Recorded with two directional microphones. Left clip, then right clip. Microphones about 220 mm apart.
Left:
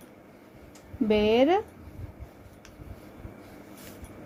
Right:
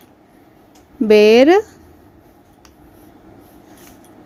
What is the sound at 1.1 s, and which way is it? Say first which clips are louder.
Speech: right 13 dB; 40° right (ahead or behind).